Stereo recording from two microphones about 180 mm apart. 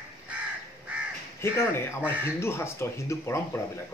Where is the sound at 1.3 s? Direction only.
15° left (ahead or behind).